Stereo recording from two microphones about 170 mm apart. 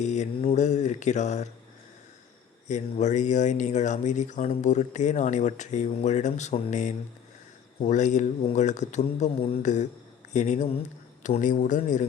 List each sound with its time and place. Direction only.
0.0 s speech: 45° left (ahead or behind)
2.6 s speech: 45° left (ahead or behind)